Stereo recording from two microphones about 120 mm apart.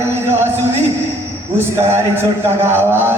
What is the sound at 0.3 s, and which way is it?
Music, 20° right (ahead or behind).